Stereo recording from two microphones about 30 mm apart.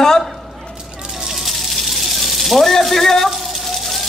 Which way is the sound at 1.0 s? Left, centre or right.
Centre.